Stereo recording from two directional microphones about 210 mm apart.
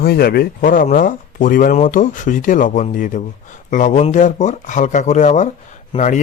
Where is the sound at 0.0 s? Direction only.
45° left (ahead or behind).